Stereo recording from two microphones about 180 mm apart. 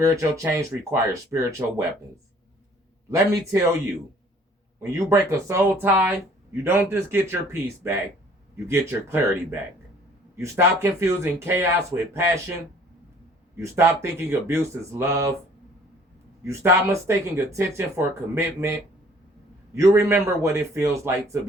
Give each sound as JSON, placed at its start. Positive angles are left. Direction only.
{"t": 0.0, "sound": "speech", "side_deg": -15}
{"t": 3.1, "sound": "speech", "side_deg": -20}
{"t": 4.8, "sound": "speech", "side_deg": -15}
{"t": 13.6, "sound": "speech", "side_deg": -15}
{"t": 16.4, "sound": "speech", "side_deg": -15}